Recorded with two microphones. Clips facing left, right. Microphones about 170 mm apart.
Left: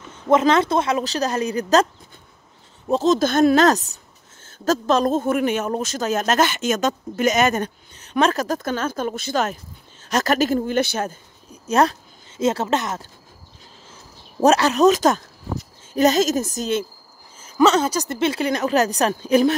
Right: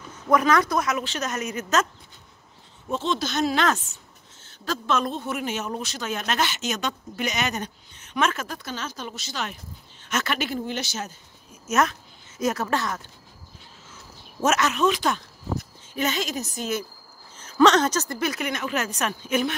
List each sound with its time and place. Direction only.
0.1 s speech: 25° left (ahead or behind)
2.9 s speech: 40° left (ahead or behind); by 11.1 s 55° left (ahead or behind)
11.6 s a woman's voice: 35° left (ahead or behind)
14.4 s speech: 35° left (ahead or behind)
17.4 s a woman's voice: 10° left (ahead or behind)
18.1 s speech: 25° left (ahead or behind)